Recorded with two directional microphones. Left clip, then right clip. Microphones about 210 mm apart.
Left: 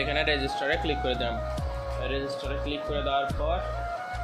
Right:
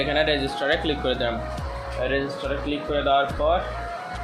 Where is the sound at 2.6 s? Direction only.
30° left (ahead or behind).